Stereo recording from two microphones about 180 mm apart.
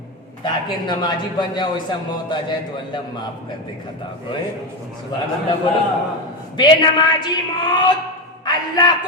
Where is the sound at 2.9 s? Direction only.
25° left (ahead or behind).